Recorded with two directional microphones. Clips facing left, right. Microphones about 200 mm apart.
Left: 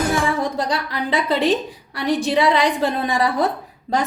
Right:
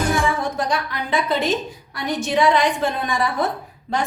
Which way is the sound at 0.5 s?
35° left (ahead or behind).